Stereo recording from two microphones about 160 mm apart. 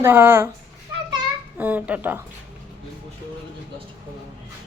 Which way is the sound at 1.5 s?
10° right (ahead or behind).